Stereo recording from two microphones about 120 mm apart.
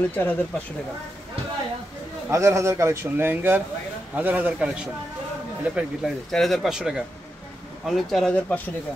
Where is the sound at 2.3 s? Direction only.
25° right (ahead or behind); by 4.9 s 10° right (ahead or behind).